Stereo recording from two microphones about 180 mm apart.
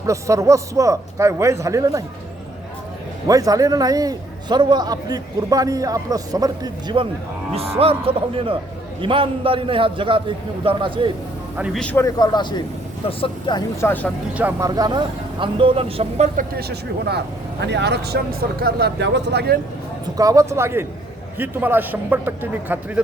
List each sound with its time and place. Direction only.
0.0 s a man's voice: 15° right (ahead or behind)
3.2 s a man's voice: 20° right (ahead or behind)
11.5 s a man's voice: 5° right (ahead or behind)
11.8 s a man's voice: 10° left (ahead or behind); by 13.6 s 30° left (ahead or behind)
13.8 s speech: 10° left (ahead or behind)
14.3 s a man's voice: 10° right (ahead or behind)
14.7 s a man's voice: 20° right (ahead or behind); by 16.5 s 40° right (ahead or behind)
16.6 s speech: 65° right (ahead or behind)
20.1 s a man's voice: 20° right (ahead or behind)